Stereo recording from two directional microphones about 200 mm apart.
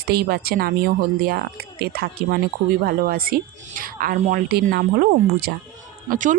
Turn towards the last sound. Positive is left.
turn(degrees=-40)  # may be behind; listen again after turning